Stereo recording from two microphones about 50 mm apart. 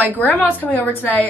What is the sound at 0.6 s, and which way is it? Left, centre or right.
Speech, left.